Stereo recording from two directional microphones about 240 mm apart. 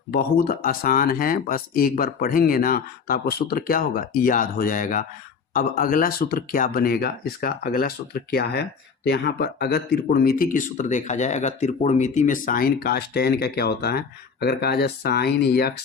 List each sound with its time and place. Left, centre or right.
0.1 s speech: left